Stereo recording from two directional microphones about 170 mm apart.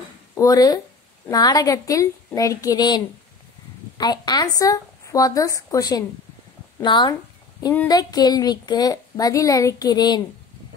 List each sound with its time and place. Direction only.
0.3 s a woman's voice: 20° left (ahead or behind)
4.0 s a woman's voice: 25° left (ahead or behind)